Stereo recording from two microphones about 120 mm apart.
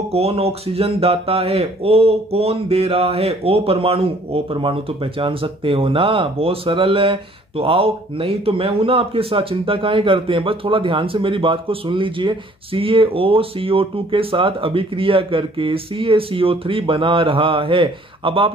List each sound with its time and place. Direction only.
0.1 s speech: 55° right (ahead or behind)